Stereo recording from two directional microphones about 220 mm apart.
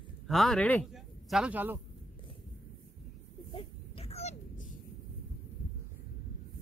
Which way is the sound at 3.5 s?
25° left (ahead or behind).